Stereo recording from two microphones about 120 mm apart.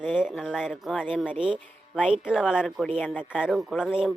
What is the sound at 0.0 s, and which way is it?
A woman's voice, 5° right (ahead or behind).